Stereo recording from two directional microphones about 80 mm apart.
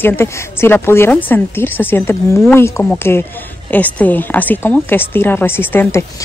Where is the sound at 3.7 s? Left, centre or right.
Left.